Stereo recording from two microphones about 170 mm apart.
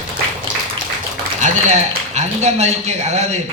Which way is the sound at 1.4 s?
45° right (ahead or behind).